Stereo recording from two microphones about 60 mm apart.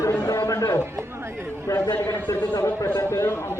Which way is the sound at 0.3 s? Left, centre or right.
Left.